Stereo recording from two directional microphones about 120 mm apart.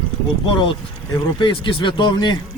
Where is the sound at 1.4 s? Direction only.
40° left (ahead or behind).